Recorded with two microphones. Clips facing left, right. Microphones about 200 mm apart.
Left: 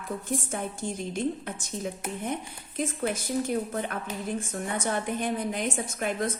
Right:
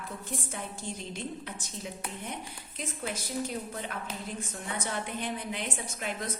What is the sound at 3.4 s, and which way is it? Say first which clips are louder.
A woman's voice: left 7 dB; 55° left (ahead or behind).